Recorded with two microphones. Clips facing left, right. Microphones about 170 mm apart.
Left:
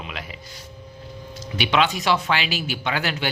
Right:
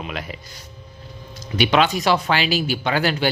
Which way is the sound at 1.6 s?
40° right (ahead or behind).